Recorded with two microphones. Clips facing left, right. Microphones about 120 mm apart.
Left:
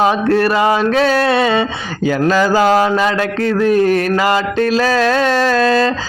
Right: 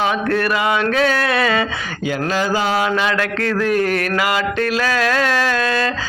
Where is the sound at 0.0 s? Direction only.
35° left (ahead or behind).